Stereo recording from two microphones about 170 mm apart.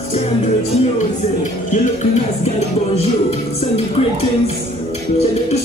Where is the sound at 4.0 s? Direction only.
35° left (ahead or behind).